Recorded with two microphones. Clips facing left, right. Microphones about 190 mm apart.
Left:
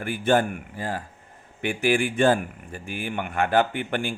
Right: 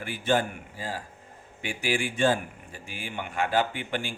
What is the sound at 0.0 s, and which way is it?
Speech, 50° left (ahead or behind).